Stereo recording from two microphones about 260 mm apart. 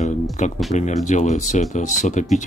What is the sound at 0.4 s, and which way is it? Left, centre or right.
Speech, left.